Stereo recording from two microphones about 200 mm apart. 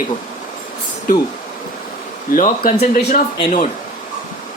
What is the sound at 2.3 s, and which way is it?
Speech, 45° left (ahead or behind).